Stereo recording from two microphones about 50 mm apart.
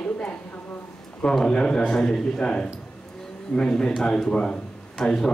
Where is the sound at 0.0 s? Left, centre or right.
Left.